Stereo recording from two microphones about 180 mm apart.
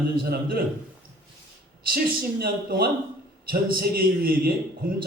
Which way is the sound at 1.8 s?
55° right (ahead or behind).